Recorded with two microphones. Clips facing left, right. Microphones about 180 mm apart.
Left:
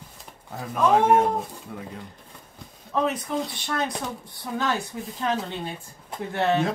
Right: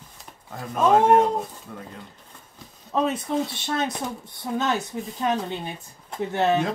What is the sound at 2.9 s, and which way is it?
Speech, 25° right (ahead or behind).